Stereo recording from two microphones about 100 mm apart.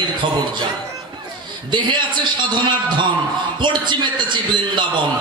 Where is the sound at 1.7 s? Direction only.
50° right (ahead or behind).